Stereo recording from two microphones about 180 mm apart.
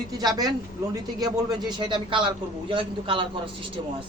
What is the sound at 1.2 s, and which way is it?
A man's voice, 25° right (ahead or behind).